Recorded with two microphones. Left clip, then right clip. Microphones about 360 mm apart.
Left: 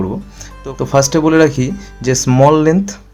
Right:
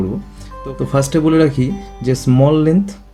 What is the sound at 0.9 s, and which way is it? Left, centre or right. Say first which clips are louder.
Speech: left 3 dB; centre.